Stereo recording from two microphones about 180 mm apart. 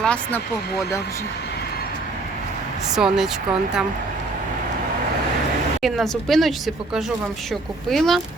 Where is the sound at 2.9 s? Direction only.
5° right (ahead or behind).